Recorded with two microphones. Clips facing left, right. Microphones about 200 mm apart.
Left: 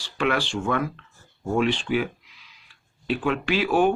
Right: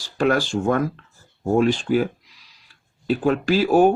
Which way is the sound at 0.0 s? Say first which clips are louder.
Right 5 dB; 40° right (ahead or behind).